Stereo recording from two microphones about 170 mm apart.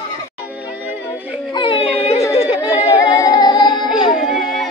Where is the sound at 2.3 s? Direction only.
35° left (ahead or behind).